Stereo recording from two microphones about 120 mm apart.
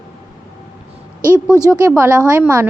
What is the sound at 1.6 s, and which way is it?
A woman's voice, 25° right (ahead or behind).